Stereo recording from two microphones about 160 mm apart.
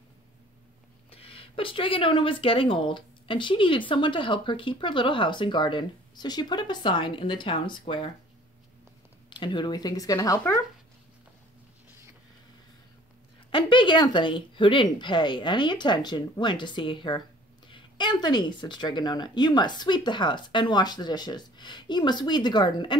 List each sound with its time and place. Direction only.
1.1 s speech: 35° left (ahead or behind)
9.3 s speech: 30° left (ahead or behind)
13.5 s speech: 30° left (ahead or behind)